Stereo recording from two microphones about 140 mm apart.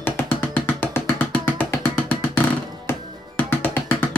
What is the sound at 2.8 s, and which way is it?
Music, 15° left (ahead or behind).